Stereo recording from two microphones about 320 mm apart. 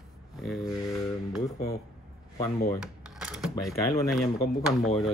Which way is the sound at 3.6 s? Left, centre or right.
Centre.